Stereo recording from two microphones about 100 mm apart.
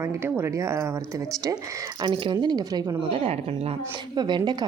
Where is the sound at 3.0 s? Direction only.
75° right (ahead or behind).